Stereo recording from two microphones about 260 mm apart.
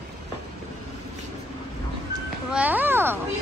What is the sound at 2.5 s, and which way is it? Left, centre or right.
Speech, centre.